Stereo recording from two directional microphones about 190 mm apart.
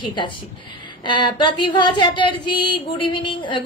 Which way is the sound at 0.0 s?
25° left (ahead or behind).